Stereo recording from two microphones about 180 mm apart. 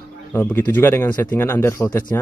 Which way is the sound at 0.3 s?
10° left (ahead or behind).